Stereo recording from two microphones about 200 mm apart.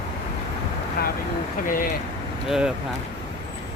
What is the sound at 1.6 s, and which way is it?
Speech, 45° left (ahead or behind).